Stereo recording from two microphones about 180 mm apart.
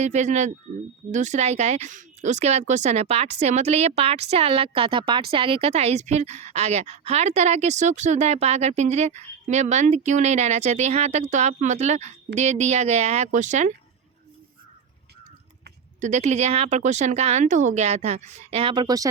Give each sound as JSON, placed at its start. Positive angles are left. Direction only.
{"t": 0.0, "sound": "a woman's voice", "side_deg": -40}
{"t": 16.0, "sound": "a woman's voice", "side_deg": -40}